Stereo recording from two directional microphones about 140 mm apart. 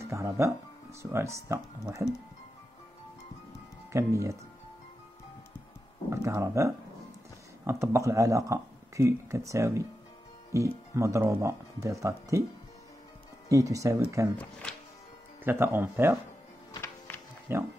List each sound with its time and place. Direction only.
0.0 s speech: 20° right (ahead or behind)
3.9 s speech: 20° right (ahead or behind)
6.0 s speech: 20° right (ahead or behind)
11.0 s speech: 20° right (ahead or behind)
13.5 s speech: 25° right (ahead or behind)
14.4 s speech: 5° left (ahead or behind)
15.4 s speech: 15° right (ahead or behind)
17.1 s music: 15° left (ahead or behind)
17.5 s speech: 15° right (ahead or behind)